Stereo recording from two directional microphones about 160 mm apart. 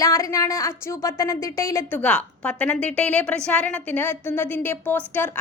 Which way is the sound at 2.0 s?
10° left (ahead or behind).